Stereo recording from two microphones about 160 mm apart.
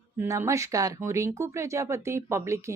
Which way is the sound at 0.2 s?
20° right (ahead or behind).